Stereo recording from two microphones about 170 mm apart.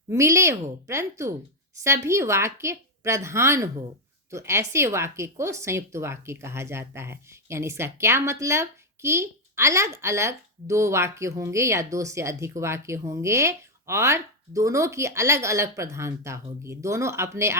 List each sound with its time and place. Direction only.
0.1 s speech: 15° right (ahead or behind)